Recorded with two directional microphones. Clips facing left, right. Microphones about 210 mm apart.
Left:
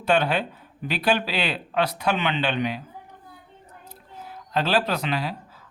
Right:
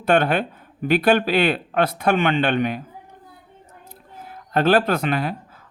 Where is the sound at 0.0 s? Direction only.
55° right (ahead or behind).